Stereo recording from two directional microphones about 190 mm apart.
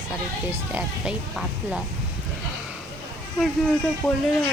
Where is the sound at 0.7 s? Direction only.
5° right (ahead or behind).